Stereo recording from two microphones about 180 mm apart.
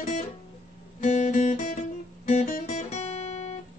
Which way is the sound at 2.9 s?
35° left (ahead or behind).